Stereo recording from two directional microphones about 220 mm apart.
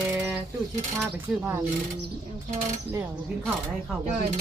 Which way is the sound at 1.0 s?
10° right (ahead or behind).